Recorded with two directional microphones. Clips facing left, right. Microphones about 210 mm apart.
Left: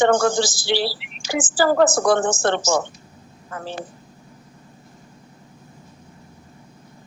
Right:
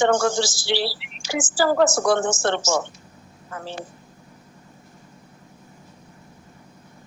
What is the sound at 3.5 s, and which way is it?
Speech, 55° left (ahead or behind).